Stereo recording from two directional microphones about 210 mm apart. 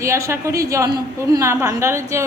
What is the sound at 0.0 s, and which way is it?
A woman's voice, 15° right (ahead or behind).